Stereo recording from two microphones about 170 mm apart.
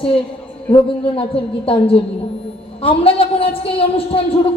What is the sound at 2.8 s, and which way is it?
Speech, 35° left (ahead or behind).